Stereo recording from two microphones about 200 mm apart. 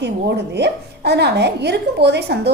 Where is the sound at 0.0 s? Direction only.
55° right (ahead or behind).